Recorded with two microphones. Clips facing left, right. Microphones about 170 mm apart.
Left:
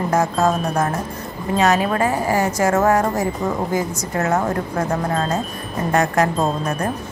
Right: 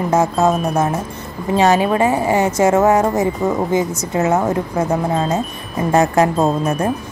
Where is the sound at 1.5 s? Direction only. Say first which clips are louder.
Right 4 dB; 30° right (ahead or behind).